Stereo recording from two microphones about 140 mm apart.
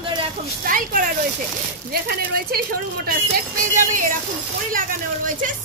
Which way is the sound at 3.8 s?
70° right (ahead or behind).